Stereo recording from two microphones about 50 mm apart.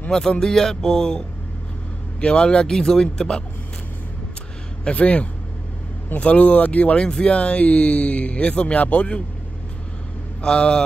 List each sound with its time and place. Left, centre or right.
0.1 s a man's voice: centre
4.8 s speech: left
10.4 s a man's voice: centre